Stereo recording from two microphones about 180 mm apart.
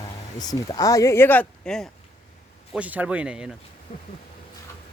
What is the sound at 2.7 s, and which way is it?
Speech, 10° right (ahead or behind).